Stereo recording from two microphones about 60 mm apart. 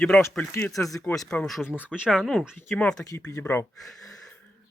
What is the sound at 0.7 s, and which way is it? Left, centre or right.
Speech, left.